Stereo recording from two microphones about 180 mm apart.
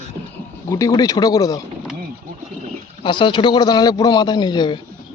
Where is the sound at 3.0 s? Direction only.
25° left (ahead or behind).